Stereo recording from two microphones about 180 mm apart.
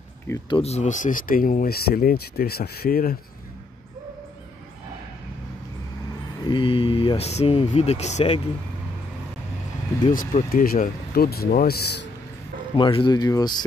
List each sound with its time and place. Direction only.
0.5 s speech: 35° left (ahead or behind); by 3.2 s 55° left (ahead or behind)
6.4 s speech: 30° left (ahead or behind)
10.0 s speech: 45° left (ahead or behind); by 12.1 s 65° left (ahead or behind)
12.7 s speech: 25° left (ahead or behind)